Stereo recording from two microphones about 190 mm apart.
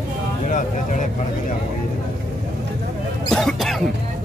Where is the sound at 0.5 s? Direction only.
40° left (ahead or behind).